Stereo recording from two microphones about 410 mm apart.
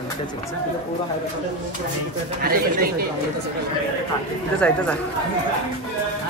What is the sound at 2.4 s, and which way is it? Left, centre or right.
Speech, right.